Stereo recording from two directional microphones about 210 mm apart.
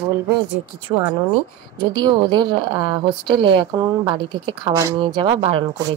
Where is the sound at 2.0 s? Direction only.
20° right (ahead or behind).